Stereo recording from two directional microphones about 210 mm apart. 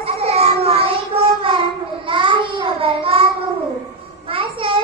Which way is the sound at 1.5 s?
25° right (ahead or behind).